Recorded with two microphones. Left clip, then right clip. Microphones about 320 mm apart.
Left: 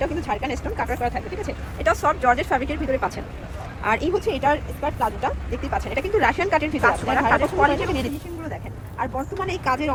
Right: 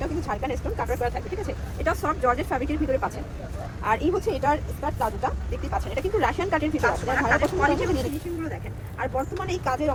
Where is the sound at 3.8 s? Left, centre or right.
Left.